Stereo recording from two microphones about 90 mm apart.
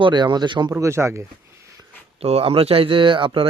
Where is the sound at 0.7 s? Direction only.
35° right (ahead or behind).